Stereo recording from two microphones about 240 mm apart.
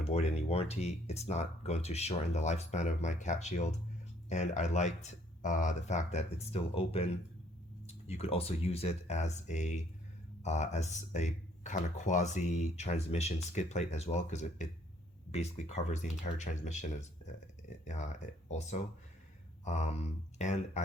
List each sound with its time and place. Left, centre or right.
0.0 s speech: left
17.8 s speech: left